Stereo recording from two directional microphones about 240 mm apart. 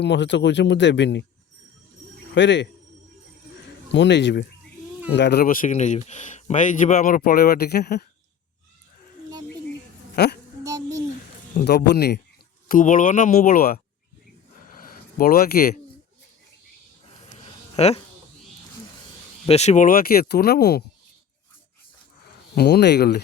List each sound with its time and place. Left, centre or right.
0.0 s speech: left
2.3 s speech: left
3.8 s speech: left
10.2 s speech: left
10.6 s a sound: centre
11.5 s speech: left
14.7 s a sound: left
17.3 s a sound: left
19.5 s speech: left
22.5 s speech: left